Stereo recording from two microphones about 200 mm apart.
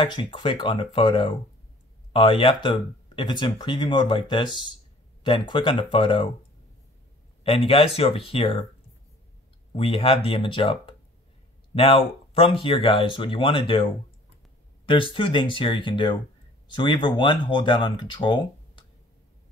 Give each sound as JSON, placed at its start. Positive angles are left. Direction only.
{"t": 0.0, "sound": "speech", "side_deg": 25}
{"t": 7.4, "sound": "speech", "side_deg": 30}
{"t": 9.8, "sound": "speech", "side_deg": 25}
{"t": 14.9, "sound": "speech", "side_deg": 25}